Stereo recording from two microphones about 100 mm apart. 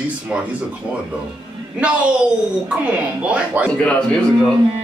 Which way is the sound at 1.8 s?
10° right (ahead or behind).